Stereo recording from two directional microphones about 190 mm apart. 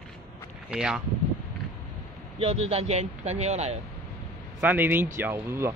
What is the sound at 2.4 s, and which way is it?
Speech, 35° right (ahead or behind).